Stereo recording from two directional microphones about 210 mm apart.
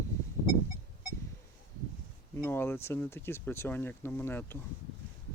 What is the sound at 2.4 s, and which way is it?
Speech, 10° left (ahead or behind).